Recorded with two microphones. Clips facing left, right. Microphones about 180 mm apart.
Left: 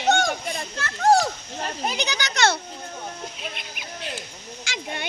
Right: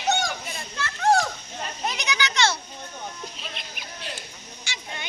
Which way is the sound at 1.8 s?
30° left (ahead or behind).